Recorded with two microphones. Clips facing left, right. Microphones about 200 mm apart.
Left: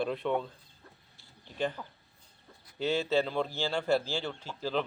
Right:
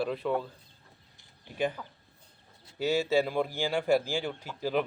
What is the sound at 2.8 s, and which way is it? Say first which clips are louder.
A man's voice: right 2 dB; 10° right (ahead or behind).